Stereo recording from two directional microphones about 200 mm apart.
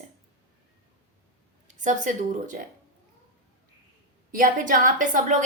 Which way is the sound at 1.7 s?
35° right (ahead or behind).